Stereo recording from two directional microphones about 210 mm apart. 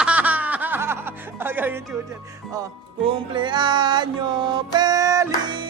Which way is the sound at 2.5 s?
20° right (ahead or behind).